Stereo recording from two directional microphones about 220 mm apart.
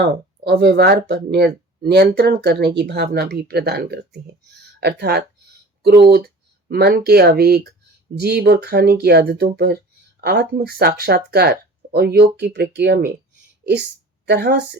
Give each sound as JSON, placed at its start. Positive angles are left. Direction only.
{"t": 0.0, "sound": "a woman's voice", "side_deg": -50}